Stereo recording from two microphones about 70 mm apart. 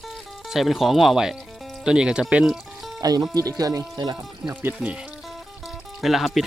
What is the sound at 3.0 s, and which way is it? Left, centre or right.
Speech, right.